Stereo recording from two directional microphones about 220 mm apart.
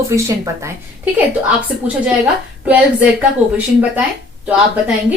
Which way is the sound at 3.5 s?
5° right (ahead or behind).